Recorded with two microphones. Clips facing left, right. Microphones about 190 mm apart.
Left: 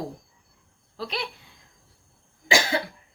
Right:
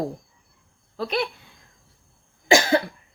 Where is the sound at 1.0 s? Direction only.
55° right (ahead or behind).